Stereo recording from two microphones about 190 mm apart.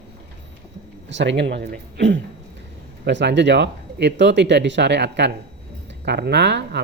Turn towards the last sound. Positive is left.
turn(degrees=-65)  # may be behind; listen again after turning